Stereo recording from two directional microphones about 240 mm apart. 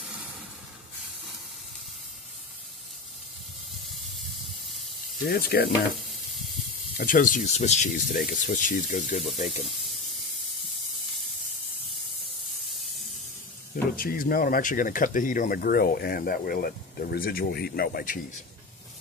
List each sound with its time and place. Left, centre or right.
5.2 s speech: left
7.0 s speech: left
13.8 s speech: left